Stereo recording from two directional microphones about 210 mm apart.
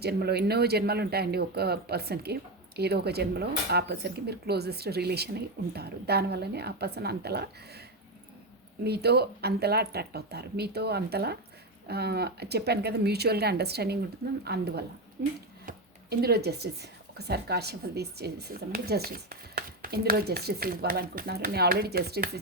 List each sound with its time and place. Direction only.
0.0 s speech: 50° right (ahead or behind)
8.8 s speech: 50° right (ahead or behind)